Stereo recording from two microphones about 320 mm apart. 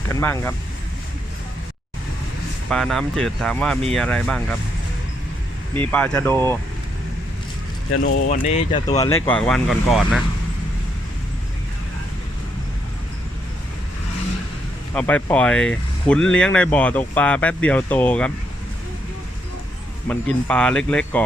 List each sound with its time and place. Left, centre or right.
0.1 s speech: centre
2.6 s speech: centre
5.9 s speech: centre
7.9 s speech: left
8.3 s speech: centre
14.9 s speech: centre
20.1 s speech: centre